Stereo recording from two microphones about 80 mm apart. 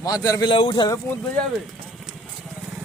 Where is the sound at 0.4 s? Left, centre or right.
Left.